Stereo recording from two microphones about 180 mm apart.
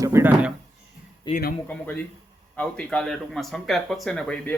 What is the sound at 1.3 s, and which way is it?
Speech, 25° left (ahead or behind).